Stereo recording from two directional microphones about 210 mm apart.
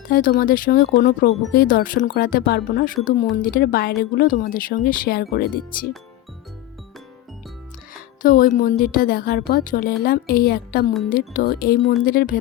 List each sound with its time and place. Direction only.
0.1 s a woman's voice: 40° left (ahead or behind)
8.2 s a woman's voice: 40° left (ahead or behind)